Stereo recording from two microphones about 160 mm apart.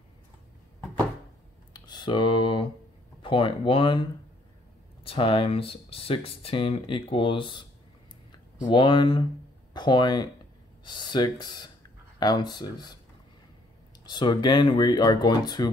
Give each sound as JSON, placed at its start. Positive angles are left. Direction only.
{"t": 1.7, "sound": "a sound", "side_deg": 30}
{"t": 3.2, "sound": "speech", "side_deg": 35}
{"t": 8.6, "sound": "speech", "side_deg": 30}
{"t": 14.0, "sound": "speech", "side_deg": 25}